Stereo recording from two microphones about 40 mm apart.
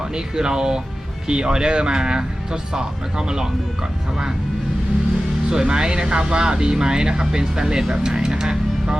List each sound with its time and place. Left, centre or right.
0.1 s speech: centre
5.5 s speech: centre